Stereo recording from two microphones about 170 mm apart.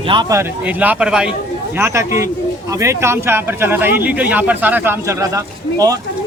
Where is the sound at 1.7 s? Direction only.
15° right (ahead or behind).